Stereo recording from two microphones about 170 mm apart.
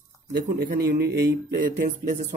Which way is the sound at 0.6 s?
65° right (ahead or behind).